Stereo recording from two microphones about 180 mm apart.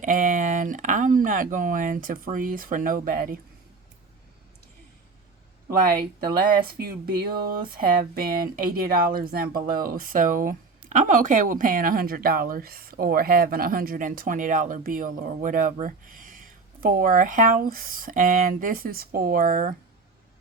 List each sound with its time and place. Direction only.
0.0 s speech: 45° right (ahead or behind)
6.1 s speech: 55° right (ahead or behind)